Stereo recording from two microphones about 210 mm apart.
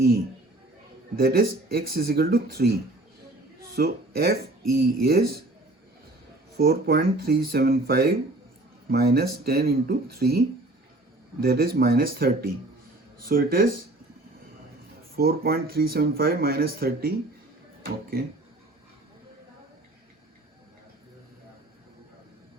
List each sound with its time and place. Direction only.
1.1 s speech: 45° right (ahead or behind)
3.8 s speech: 45° right (ahead or behind)
6.6 s speech: 45° right (ahead or behind)
11.4 s speech: 45° right (ahead or behind)
15.1 s speech: 45° right (ahead or behind)